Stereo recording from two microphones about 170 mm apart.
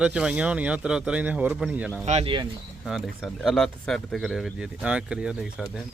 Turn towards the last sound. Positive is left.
turn(degrees=-5)  # may be behind; listen again after turning